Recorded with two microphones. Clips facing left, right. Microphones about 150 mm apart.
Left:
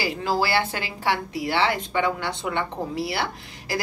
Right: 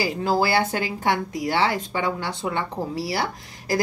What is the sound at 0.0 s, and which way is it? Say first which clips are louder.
A woman's voice: right 2 dB; 40° right (ahead or behind).